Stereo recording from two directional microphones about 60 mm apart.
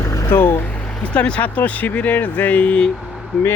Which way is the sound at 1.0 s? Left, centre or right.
Centre.